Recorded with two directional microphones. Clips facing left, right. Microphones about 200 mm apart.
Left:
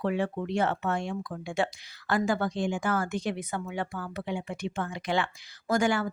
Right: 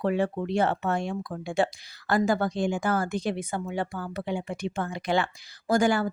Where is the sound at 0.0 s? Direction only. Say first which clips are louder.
Right 3 dB; 40° right (ahead or behind).